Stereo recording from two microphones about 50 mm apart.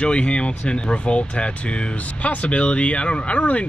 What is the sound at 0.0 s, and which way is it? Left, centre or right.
Speech, left.